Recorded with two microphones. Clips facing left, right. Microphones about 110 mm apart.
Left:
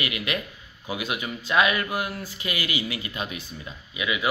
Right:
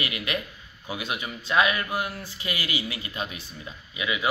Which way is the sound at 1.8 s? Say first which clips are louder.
Left 1 dB; 15° left (ahead or behind).